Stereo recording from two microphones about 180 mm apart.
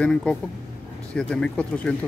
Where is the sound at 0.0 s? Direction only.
5° left (ahead or behind).